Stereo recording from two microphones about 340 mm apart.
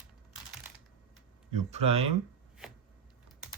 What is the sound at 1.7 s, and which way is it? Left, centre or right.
Speech, centre.